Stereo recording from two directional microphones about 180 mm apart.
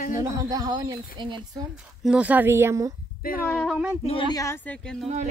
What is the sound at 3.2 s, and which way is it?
Speech, 55° left (ahead or behind).